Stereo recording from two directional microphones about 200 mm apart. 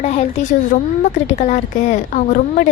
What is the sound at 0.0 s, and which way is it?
A woman's voice, 30° left (ahead or behind).